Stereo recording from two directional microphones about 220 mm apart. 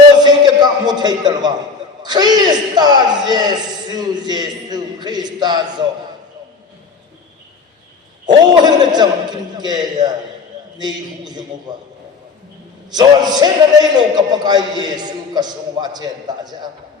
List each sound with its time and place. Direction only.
0.6 s a sound: 20° right (ahead or behind)
2.0 s a man's voice: 20° right (ahead or behind)
8.3 s a man's voice: 20° right (ahead or behind)
12.9 s a man's voice: 20° right (ahead or behind)